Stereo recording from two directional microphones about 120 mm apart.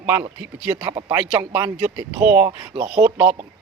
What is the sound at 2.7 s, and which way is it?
Speech, 50° right (ahead or behind).